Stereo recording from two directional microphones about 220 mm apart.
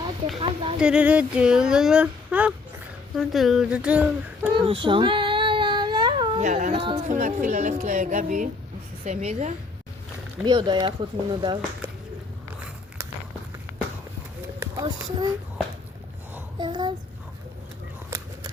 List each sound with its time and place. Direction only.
0.3 s speech: 25° right (ahead or behind)
0.8 s speech: 5° right (ahead or behind)
4.5 s child singing: 20° right (ahead or behind)
7.1 s speech: 35° right (ahead or behind)
10.4 s speech: 20° right (ahead or behind)
14.6 s a sound: 15° right (ahead or behind)
16.6 s a sound: 20° right (ahead or behind)